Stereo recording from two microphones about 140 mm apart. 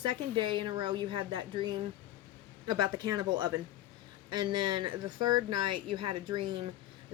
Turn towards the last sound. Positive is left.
turn(degrees=-35)  # may be behind; listen again after turning